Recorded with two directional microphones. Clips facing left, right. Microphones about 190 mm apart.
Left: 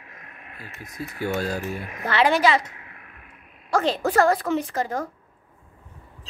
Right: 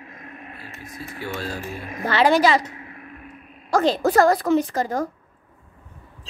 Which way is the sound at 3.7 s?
35° right (ahead or behind).